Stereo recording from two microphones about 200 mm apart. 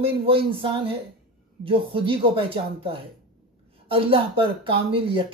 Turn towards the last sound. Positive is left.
turn(degrees=-25)  # may be behind; listen again after turning